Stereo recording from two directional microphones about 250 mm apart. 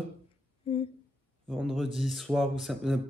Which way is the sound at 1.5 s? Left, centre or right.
Centre.